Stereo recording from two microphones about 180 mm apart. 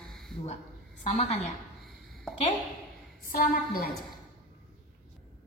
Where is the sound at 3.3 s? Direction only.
55° left (ahead or behind).